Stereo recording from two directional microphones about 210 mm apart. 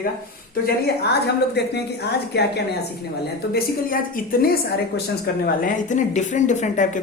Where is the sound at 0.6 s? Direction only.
50° left (ahead or behind).